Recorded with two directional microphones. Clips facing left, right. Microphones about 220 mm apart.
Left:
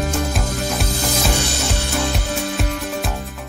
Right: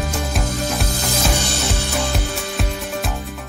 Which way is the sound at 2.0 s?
Centre (ahead or behind).